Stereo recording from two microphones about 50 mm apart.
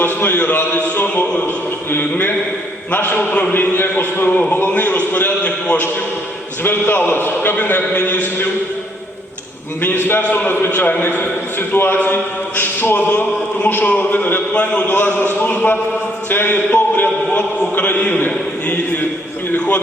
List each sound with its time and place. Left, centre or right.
0.0 s a man's voice: left
1.0 s music: left
1.9 s a man's voice: left
5.4 s a man's voice: left
6.6 s a man's voice: left
9.8 s a man's voice: left
10.2 s a man's voice: left
10.5 s a man's voice: left
11.9 s a man's voice: left
12.5 s a man's voice: left
13.7 s a man's voice: left
14.8 s a man's voice: left